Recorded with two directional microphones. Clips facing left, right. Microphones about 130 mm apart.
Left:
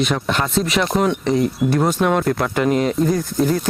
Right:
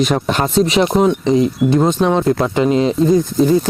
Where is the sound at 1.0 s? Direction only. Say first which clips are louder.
Right 4 dB; 20° right (ahead or behind).